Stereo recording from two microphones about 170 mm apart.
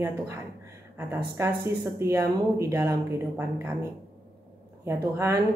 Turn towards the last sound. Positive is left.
turn(degrees=-15)  # may be behind; listen again after turning